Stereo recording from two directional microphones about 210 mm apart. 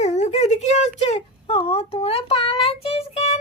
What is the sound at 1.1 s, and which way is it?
Child singing, 25° left (ahead or behind).